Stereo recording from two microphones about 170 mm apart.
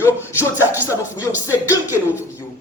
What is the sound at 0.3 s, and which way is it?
Music, 10° right (ahead or behind).